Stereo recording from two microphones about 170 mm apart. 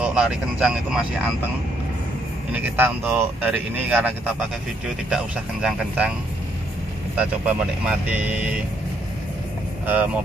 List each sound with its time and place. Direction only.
0.0 s speech: 5° right (ahead or behind)
2.5 s speech: 10° right (ahead or behind)
7.2 s speech: 10° right (ahead or behind)
9.8 s speech: 10° right (ahead or behind)